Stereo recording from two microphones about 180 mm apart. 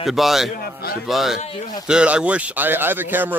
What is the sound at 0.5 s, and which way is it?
Speech, 55° left (ahead or behind).